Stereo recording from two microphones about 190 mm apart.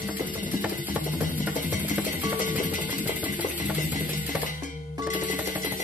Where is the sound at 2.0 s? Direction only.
45° left (ahead or behind).